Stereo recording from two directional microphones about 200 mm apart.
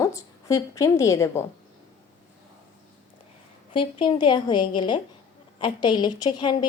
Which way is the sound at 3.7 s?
25° left (ahead or behind).